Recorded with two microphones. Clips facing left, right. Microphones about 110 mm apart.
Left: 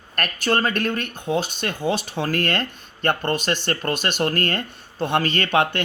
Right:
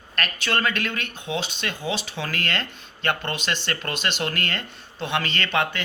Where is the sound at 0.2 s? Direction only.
45° left (ahead or behind).